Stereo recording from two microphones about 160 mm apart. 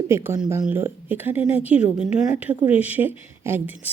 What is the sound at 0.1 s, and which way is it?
A woman's voice, 15° right (ahead or behind).